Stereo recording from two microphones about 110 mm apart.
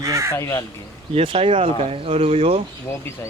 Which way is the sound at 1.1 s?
55° right (ahead or behind).